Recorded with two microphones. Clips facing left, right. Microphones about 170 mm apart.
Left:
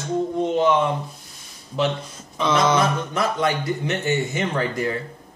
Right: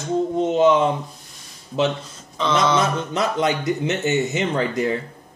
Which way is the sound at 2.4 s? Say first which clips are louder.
Even; 10° left (ahead or behind).